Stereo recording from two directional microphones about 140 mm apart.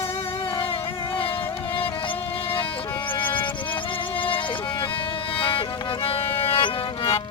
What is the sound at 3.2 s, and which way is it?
Music, 35° left (ahead or behind).